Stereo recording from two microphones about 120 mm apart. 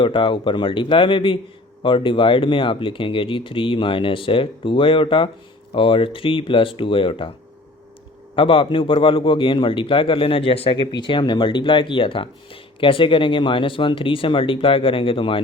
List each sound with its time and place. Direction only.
0.0 s a man's voice: 45° left (ahead or behind)
8.4 s a man's voice: 45° left (ahead or behind)